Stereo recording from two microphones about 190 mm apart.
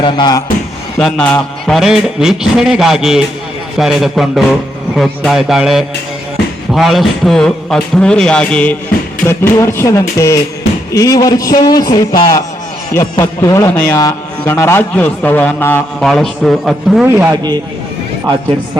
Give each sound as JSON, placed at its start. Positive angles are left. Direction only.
{"t": 0.0, "sound": "a man's voice", "side_deg": 25}
{"t": 0.9, "sound": "a man's voice", "side_deg": 5}
{"t": 17.1, "sound": "a man's voice", "side_deg": -10}